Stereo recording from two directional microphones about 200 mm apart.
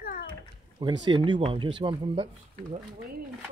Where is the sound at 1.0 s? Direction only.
25° right (ahead or behind).